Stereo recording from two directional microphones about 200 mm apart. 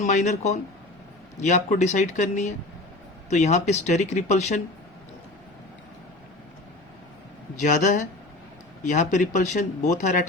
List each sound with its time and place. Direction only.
0.0 s speech: 35° left (ahead or behind)
7.6 s speech: 40° left (ahead or behind)